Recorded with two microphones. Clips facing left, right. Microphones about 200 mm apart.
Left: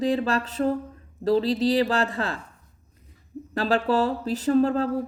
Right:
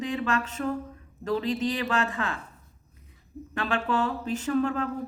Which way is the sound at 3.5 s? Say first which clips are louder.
Left 5 dB; 35° left (ahead or behind).